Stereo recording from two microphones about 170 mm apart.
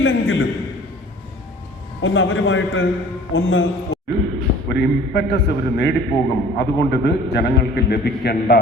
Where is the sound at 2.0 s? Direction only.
90° left.